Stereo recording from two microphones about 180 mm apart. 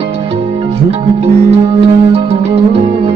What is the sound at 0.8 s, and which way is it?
Music, 35° right (ahead or behind).